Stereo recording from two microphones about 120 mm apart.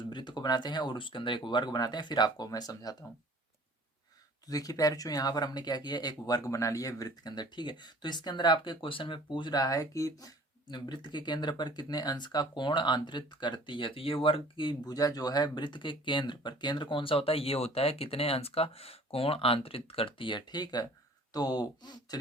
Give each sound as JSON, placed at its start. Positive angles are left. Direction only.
{"t": 0.1, "sound": "speech", "side_deg": 40}
{"t": 4.4, "sound": "speech", "side_deg": 30}